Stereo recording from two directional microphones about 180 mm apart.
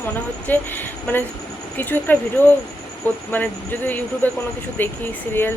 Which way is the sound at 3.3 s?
10° left (ahead or behind).